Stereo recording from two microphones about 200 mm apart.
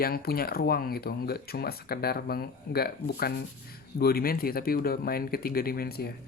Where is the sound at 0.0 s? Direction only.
50° left (ahead or behind).